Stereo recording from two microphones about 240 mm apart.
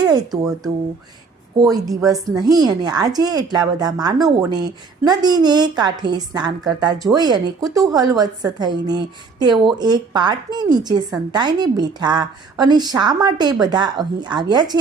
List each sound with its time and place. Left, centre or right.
0.0 s a woman's voice: centre